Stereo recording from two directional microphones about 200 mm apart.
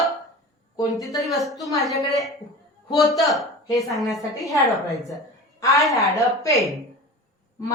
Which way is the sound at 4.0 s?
Centre (ahead or behind).